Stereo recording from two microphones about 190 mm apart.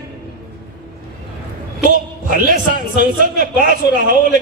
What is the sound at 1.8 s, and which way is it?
A man's voice, 45° right (ahead or behind).